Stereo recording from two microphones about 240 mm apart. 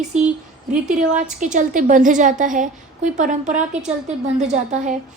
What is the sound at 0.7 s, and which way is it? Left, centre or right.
A woman's voice, right.